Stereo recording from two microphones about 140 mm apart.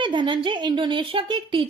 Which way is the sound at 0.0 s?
35° right (ahead or behind).